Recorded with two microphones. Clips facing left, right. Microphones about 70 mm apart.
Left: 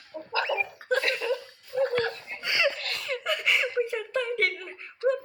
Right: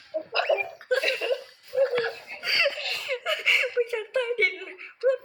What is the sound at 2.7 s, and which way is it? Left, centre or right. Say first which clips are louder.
Laughter: right 1 dB; left.